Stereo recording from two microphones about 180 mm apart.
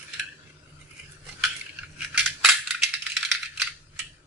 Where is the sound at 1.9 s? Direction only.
5° right (ahead or behind).